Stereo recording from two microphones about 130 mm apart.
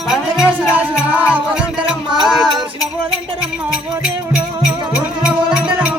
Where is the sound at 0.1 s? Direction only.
5° right (ahead or behind).